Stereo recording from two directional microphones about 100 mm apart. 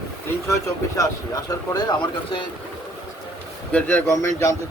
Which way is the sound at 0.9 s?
35° left (ahead or behind).